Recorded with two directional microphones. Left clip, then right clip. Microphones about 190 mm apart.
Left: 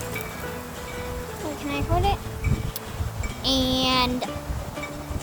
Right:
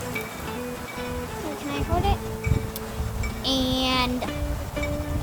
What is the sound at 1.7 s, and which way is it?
Speech, 30° left (ahead or behind).